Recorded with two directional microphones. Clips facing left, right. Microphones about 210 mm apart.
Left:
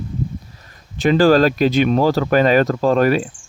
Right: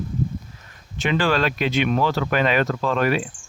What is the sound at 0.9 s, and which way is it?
Speech, 35° left (ahead or behind).